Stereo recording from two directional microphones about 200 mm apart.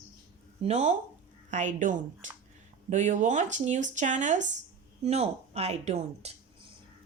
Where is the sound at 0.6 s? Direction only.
35° right (ahead or behind).